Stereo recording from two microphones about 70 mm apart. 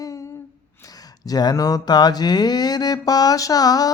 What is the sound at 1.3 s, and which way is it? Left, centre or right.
Mantra, left.